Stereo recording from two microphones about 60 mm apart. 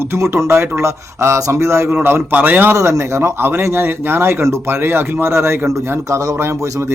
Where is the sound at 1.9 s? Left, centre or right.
Right.